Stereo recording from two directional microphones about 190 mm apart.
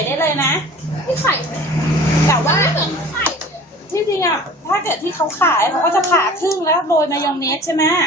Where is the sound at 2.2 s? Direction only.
15° left (ahead or behind).